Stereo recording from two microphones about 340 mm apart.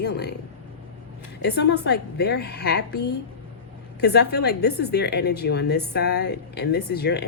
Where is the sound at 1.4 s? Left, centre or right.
Left.